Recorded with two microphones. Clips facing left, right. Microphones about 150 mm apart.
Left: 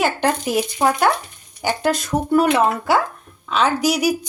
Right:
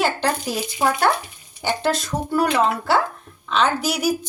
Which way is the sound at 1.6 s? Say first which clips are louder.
Left 2 dB; 15° left (ahead or behind).